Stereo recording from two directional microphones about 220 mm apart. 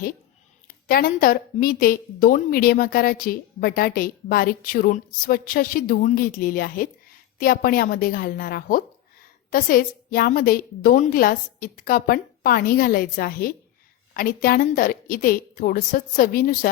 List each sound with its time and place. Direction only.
0.9 s a woman's voice: 40° left (ahead or behind)